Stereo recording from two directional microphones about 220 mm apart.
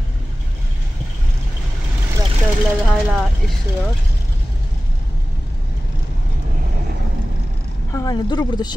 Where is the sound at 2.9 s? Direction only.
Centre (ahead or behind).